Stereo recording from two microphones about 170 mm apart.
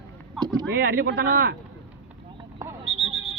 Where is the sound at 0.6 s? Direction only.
70° right (ahead or behind).